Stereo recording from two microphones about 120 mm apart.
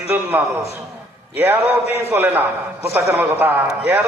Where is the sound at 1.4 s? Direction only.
20° right (ahead or behind).